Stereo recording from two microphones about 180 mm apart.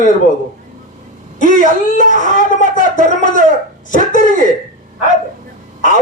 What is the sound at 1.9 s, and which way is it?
A man's voice, 45° left (ahead or behind).